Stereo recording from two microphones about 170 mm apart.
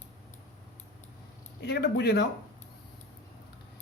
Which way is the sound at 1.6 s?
75° left (ahead or behind).